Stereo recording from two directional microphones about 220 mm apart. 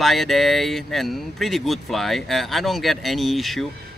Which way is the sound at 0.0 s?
Centre (ahead or behind).